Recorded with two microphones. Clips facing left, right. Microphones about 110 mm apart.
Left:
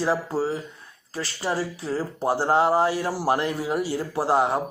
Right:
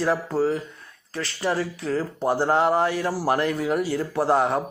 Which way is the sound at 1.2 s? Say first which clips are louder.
Right 2 dB; 30° left (ahead or behind).